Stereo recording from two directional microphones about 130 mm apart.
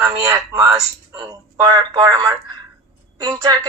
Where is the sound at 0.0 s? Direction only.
25° right (ahead or behind).